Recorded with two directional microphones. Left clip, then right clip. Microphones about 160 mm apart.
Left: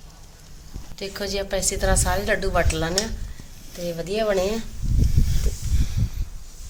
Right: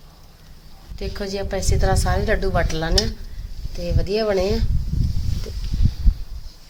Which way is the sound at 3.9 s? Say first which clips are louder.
Right 2 dB; 20° right (ahead or behind).